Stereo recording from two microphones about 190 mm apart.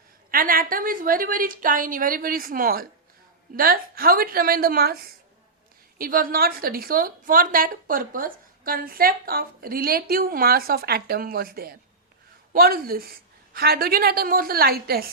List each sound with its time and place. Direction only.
0.3 s a woman's voice: 50° right (ahead or behind)